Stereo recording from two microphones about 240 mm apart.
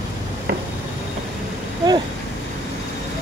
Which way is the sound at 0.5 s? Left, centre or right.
Right.